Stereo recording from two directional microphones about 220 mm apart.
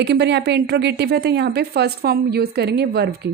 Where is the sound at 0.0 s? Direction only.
50° right (ahead or behind).